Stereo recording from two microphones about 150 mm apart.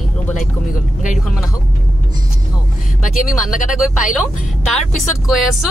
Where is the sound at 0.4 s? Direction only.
55° left (ahead or behind).